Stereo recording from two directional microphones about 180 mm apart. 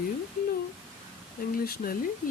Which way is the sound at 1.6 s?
55° left (ahead or behind).